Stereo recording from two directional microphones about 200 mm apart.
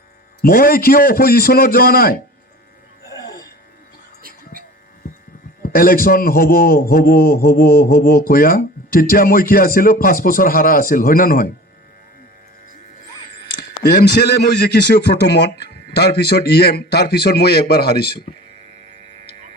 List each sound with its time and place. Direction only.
0.4 s a man's voice: 50° left (ahead or behind)
3.2 s a sound: 20° left (ahead or behind)
4.2 s music: 45° right (ahead or behind)
5.6 s a man's voice: 45° left (ahead or behind)
14.0 s a man's voice: 55° left (ahead or behind)